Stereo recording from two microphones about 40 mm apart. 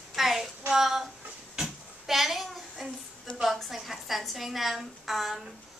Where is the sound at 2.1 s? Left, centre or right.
Centre.